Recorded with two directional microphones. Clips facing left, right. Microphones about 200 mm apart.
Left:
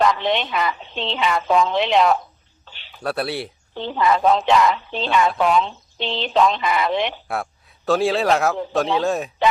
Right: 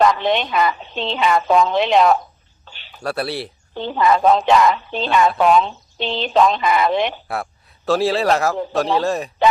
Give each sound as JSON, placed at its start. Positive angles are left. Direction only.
{"t": 0.0, "sound": "a woman's voice", "side_deg": -45}
{"t": 2.6, "sound": "a sound", "side_deg": -45}
{"t": 3.0, "sound": "speech", "side_deg": 0}
{"t": 3.8, "sound": "a woman's voice", "side_deg": -45}
{"t": 7.3, "sound": "a man's voice", "side_deg": 0}